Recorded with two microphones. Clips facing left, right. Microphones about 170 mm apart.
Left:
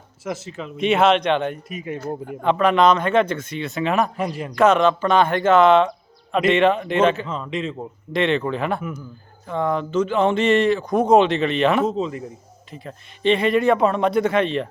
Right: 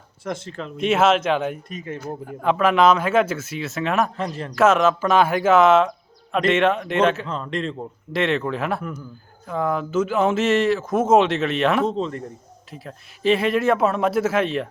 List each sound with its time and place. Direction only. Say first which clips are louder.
0.3 s speech: even; 5° left (ahead or behind)
1.7 s a man's voice: left 2 dB; 15° left (ahead or behind)
2.0 s a man's voice: left 3 dB; centre (ahead or behind)
4.5 s speech: left 1 dB; 5° right (ahead or behind)